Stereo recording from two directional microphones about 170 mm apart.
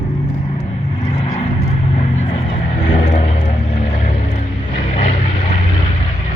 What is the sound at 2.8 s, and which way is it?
Vehicle, 40° left (ahead or behind).